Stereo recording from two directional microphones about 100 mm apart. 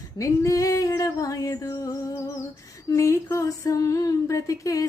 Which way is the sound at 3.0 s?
30° left (ahead or behind).